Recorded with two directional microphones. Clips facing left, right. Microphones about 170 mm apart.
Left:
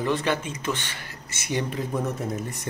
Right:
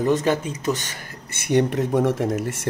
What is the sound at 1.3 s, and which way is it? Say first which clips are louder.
Speech: right 9 dB; 60° right (ahead or behind).